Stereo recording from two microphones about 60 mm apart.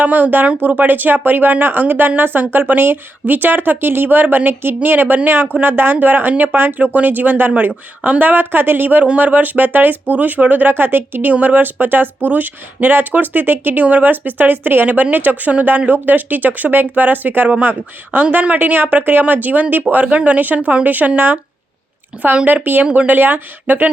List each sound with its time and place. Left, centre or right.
0.0 s speech: right
22.1 s speech: centre
22.6 s speech: right